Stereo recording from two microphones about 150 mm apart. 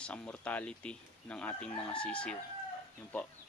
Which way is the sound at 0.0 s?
10° left (ahead or behind).